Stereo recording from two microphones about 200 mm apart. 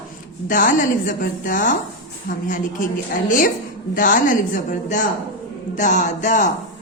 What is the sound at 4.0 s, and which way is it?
A woman's voice, 40° left (ahead or behind).